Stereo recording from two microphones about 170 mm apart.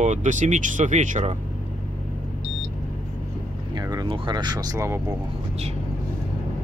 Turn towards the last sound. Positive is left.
turn(degrees=-15)  # may be behind; listen again after turning